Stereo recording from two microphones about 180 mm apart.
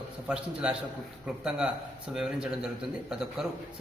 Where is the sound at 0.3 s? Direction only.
5° right (ahead or behind).